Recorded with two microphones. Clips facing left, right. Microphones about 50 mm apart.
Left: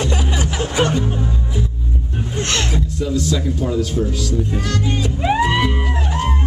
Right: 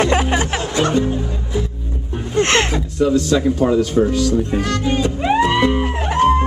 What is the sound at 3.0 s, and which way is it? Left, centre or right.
Speech, right.